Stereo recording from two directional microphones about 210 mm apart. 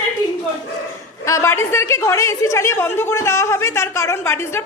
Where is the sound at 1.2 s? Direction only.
15° left (ahead or behind).